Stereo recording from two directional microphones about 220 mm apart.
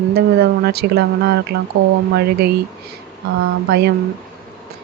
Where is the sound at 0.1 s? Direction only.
45° right (ahead or behind).